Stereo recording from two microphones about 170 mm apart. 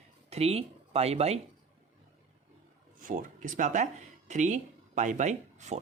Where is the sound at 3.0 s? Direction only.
55° right (ahead or behind).